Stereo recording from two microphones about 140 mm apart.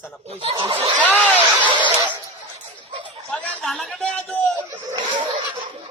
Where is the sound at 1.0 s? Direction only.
10° left (ahead or behind).